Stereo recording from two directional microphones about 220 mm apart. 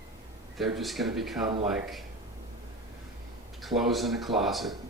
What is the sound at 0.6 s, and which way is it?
Speech, centre (ahead or behind).